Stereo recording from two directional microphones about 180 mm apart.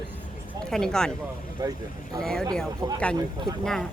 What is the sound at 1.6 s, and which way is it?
Speech, 20° right (ahead or behind).